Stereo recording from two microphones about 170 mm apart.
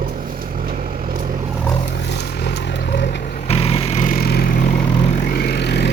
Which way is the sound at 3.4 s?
35° left (ahead or behind).